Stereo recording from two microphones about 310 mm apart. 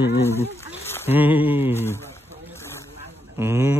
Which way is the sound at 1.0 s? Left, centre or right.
Centre.